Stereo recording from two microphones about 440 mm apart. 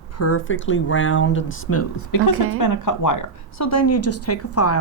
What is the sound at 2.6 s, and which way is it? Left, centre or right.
Speech, left.